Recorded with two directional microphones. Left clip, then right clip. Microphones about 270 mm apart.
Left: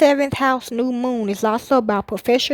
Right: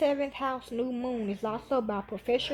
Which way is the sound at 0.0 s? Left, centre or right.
Left.